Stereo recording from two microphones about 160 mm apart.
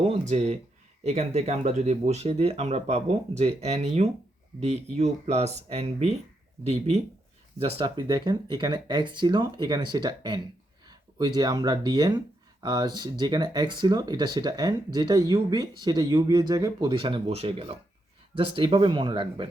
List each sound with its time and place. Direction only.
0.0 s speech: 45° right (ahead or behind)